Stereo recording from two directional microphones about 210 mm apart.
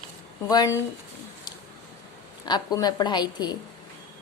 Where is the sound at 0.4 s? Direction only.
15° left (ahead or behind).